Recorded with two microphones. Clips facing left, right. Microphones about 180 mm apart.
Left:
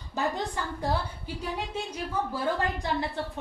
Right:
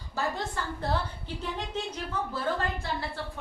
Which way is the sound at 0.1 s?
15° left (ahead or behind).